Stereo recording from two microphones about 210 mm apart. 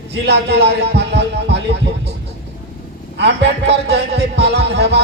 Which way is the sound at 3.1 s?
55° right (ahead or behind).